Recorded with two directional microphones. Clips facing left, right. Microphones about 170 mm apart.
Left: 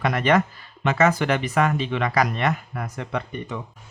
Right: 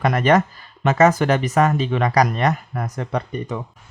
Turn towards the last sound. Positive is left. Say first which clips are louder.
# right 4 dB
turn(degrees=-40)  # may be behind; listen again after turning